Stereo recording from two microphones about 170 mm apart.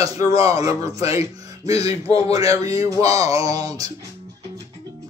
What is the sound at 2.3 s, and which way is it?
A man's voice, 20° right (ahead or behind).